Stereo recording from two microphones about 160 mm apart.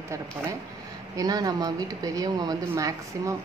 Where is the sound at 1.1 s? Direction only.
25° right (ahead or behind).